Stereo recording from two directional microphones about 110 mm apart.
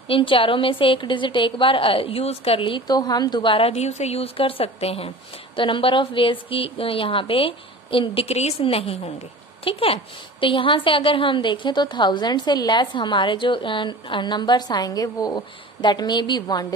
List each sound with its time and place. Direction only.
0.1 s a woman's voice: 55° left (ahead or behind)
3.5 s speech: 70° left (ahead or behind)
5.6 s a woman's voice: 50° left (ahead or behind)